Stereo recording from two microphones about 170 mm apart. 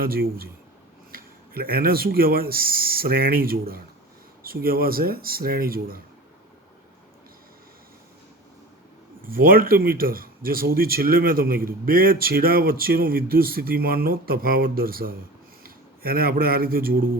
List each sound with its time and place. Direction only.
0.0 s speech: 60° right (ahead or behind)
9.2 s a man's voice: 55° right (ahead or behind)